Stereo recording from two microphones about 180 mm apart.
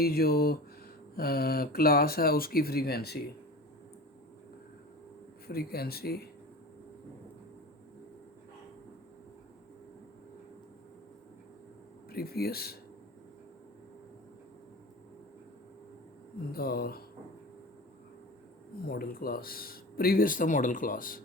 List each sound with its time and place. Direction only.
0.0 s speech: 60° left (ahead or behind)
5.5 s speech: 60° left (ahead or behind)
12.1 s speech: 60° left (ahead or behind)
16.5 s speech: 55° left (ahead or behind)
18.9 s speech: 55° left (ahead or behind)